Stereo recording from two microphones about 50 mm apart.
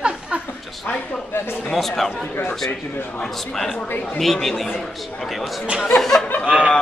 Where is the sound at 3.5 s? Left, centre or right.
Centre.